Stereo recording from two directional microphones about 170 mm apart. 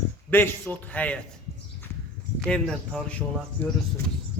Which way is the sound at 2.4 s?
5° left (ahead or behind).